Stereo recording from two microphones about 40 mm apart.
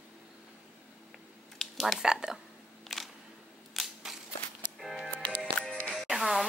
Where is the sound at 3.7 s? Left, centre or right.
Centre.